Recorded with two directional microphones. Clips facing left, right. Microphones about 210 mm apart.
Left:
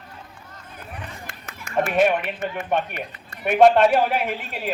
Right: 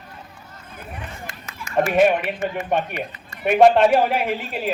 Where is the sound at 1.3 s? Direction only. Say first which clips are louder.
Right 2 dB; 60° left (ahead or behind).